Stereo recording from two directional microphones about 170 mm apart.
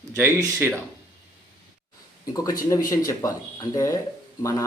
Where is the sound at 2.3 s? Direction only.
20° left (ahead or behind).